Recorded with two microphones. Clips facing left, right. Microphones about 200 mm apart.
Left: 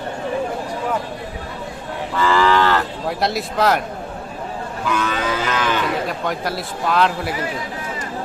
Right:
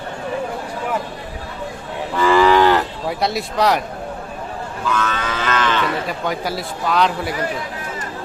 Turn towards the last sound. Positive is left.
turn(degrees=0)  # may be behind; listen again after turning